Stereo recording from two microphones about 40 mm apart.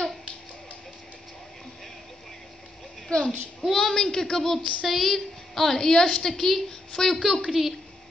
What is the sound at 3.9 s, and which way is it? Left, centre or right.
A woman's voice, centre.